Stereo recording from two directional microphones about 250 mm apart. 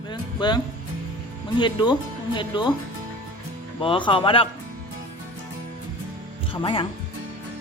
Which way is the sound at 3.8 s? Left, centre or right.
Centre.